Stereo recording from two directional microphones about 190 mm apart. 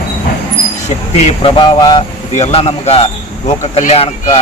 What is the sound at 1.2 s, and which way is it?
Speech, 35° left (ahead or behind).